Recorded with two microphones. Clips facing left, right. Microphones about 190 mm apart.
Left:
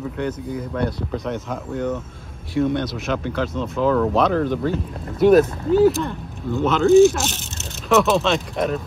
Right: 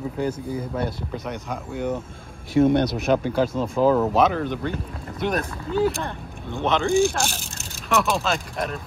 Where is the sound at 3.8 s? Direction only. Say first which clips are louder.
Right 1 dB; 40° right (ahead or behind).